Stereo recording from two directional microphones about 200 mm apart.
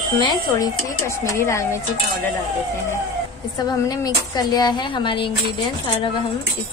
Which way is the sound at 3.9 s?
20° left (ahead or behind).